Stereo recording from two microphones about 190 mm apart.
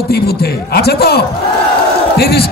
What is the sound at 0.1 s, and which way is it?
A man's voice, 55° left (ahead or behind).